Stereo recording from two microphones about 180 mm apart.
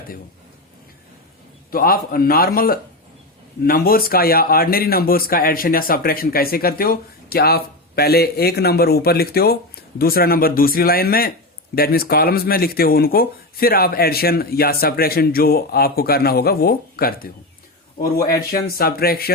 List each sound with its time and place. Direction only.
1.7 s a man's voice: 55° left (ahead or behind)